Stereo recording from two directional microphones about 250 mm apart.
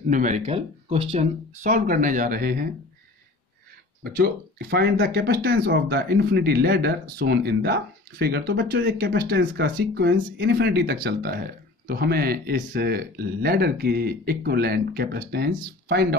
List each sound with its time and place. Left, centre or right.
0.1 s speech: right
4.0 s speech: right